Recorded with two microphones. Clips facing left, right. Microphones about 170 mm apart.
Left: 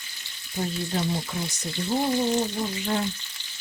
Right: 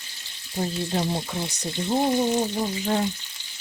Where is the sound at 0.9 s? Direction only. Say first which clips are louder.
Right 2 dB; 30° right (ahead or behind).